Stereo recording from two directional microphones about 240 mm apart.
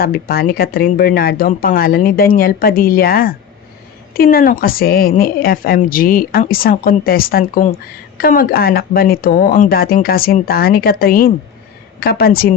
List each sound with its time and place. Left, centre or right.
0.0 s a woman's voice: left